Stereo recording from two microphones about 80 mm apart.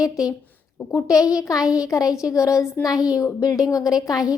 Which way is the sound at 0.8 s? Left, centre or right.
Left.